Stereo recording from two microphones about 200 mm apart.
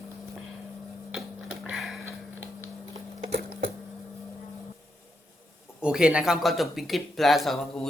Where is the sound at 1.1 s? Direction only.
Centre (ahead or behind).